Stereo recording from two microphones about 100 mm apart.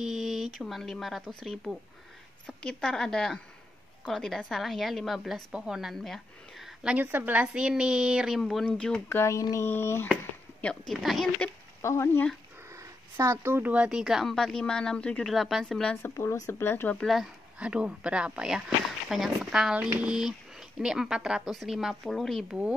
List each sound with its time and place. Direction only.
0.0 s a woman's voice: 5° right (ahead or behind)
9.1 s speech: 30° left (ahead or behind)
10.6 s a woman's voice: 5° left (ahead or behind)
11.8 s speech: 25° left (ahead or behind)
12.7 s a woman's voice: 30° right (ahead or behind); by 15.3 s 10° left (ahead or behind)
15.3 s a woman's voice: centre (ahead or behind)
16.0 s speech: 25° left (ahead or behind)
17.0 s a woman's voice: centre (ahead or behind)
17.6 s a woman's voice: 10° right (ahead or behind)